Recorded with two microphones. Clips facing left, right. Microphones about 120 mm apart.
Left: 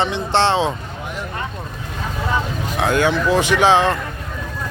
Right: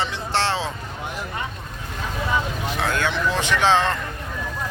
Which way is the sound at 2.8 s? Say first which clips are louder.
Left 7 dB; 15° left (ahead or behind).